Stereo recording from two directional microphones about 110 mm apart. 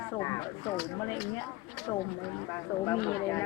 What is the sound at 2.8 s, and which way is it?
Speech, 30° left (ahead or behind).